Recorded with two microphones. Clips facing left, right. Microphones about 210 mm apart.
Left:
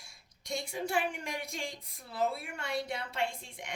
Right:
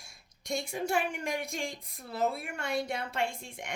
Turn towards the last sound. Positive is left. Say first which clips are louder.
# right 2 dB
turn(degrees=-45)  # may be behind; listen again after turning